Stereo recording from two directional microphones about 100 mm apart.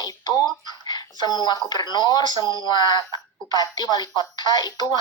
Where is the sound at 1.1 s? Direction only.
45° left (ahead or behind).